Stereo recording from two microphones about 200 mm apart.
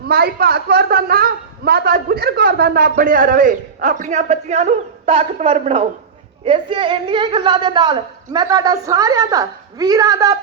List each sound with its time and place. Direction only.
0.1 s a woman's voice: 50° right (ahead or behind); by 10.3 s 15° right (ahead or behind)